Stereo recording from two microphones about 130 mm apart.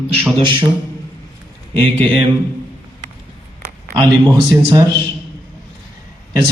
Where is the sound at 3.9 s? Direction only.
30° right (ahead or behind).